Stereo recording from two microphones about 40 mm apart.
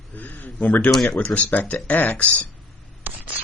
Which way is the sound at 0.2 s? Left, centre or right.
Left.